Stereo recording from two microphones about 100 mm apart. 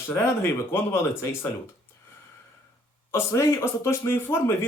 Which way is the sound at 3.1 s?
25° left (ahead or behind).